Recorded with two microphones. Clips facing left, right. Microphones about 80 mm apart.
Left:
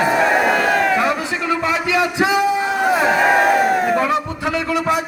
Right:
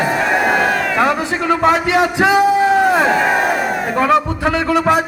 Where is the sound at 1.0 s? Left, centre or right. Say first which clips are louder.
Right 3 dB; right.